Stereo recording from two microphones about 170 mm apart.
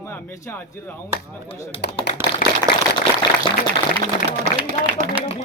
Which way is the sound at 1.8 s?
80° left.